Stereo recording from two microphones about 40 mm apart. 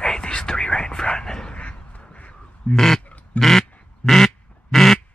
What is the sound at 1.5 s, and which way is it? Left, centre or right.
Duck, left.